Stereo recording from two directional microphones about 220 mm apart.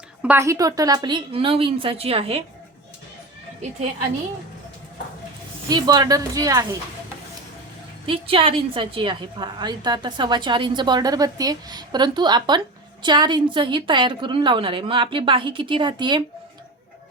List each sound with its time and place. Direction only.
0.2 s a woman's voice: 10° right (ahead or behind); by 2.4 s 25° right (ahead or behind)
5.6 s speech: 20° right (ahead or behind)
8.0 s a woman's voice: 25° right (ahead or behind)